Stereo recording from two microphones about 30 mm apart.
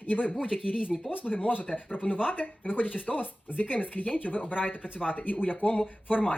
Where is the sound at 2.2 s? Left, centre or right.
Left.